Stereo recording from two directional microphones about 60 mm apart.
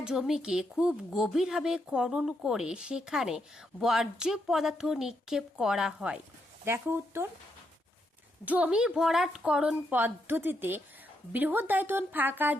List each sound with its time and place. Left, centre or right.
0.0 s a woman's voice: centre
6.7 s a woman's voice: right
8.4 s a woman's voice: right
9.9 s a woman's voice: right